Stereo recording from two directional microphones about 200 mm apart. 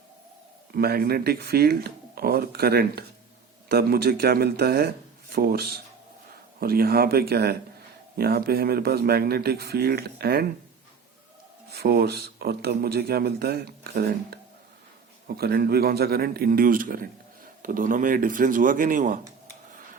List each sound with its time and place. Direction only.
0.7 s a man's voice: 50° right (ahead or behind)
11.7 s a man's voice: 55° right (ahead or behind)
15.4 s a man's voice: 50° right (ahead or behind)